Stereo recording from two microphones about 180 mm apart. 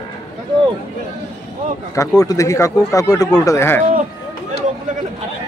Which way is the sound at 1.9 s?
20° left (ahead or behind).